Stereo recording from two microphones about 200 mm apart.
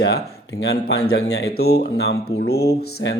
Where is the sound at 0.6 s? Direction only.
55° left (ahead or behind).